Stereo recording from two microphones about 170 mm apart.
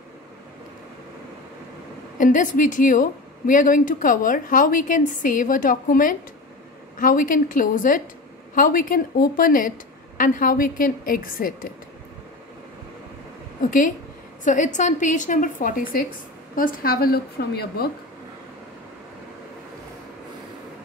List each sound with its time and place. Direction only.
2.1 s a woman's voice: 50° left (ahead or behind)
13.7 s speech: 50° left (ahead or behind); by 17.8 s 65° left (ahead or behind)